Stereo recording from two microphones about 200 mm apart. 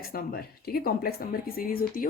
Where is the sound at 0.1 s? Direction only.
50° left (ahead or behind).